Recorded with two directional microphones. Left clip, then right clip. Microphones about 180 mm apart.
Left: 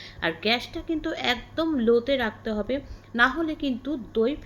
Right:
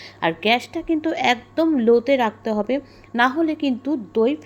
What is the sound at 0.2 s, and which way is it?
A woman's voice, 15° right (ahead or behind).